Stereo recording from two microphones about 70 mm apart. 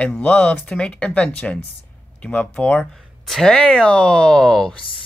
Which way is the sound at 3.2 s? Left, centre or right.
Centre.